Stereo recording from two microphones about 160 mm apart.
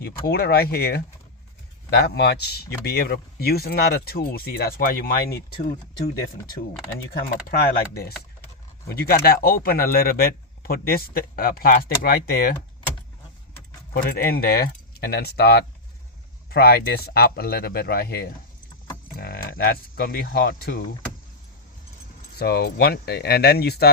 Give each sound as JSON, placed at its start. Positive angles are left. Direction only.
{"t": 0.0, "sound": "speech", "side_deg": 80}
{"t": 7.1, "sound": "speech", "side_deg": 90}
{"t": 13.9, "sound": "speech", "side_deg": 65}
{"t": 22.4, "sound": "speech", "side_deg": 90}